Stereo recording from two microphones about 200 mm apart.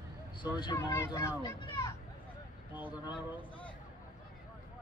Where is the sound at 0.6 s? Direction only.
20° left (ahead or behind).